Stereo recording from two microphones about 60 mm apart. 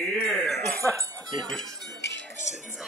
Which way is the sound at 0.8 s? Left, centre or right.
Right.